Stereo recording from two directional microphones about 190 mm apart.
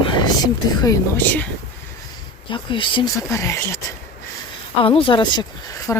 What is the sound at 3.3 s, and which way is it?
Speech, 15° left (ahead or behind).